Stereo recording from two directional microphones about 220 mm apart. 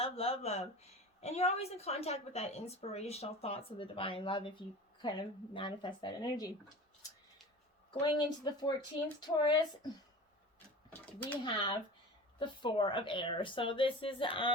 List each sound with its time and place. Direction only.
0.0 s a woman's voice: 25° left (ahead or behind)
5.5 s a woman's voice: 20° left (ahead or behind)
7.9 s a woman's voice: 20° left (ahead or behind)
10.8 s a sound: 5° left (ahead or behind)
11.4 s a woman's voice: 20° left (ahead or behind)